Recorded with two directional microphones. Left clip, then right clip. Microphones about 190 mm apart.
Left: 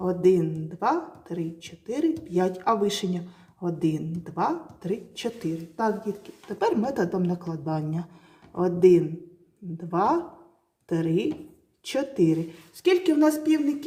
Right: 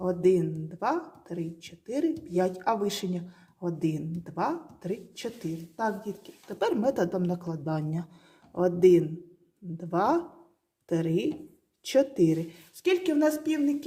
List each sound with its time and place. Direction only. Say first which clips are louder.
0.0 s speech: left 3 dB; 15° right (ahead or behind)
6.5 s speech: left 2 dB; 25° right (ahead or behind)